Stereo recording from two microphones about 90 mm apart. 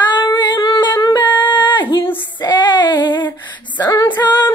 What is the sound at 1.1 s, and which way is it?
Humming, 20° left (ahead or behind).